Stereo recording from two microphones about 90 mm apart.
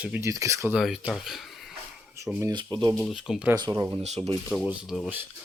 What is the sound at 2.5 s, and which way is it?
Speech, 55° right (ahead or behind).